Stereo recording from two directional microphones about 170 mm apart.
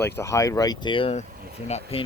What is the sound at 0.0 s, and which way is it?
Speech, 15° left (ahead or behind).